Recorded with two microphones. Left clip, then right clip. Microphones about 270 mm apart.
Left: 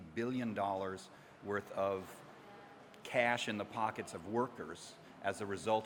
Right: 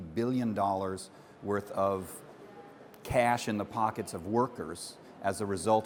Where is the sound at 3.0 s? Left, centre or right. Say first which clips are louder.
Right 6 dB; right.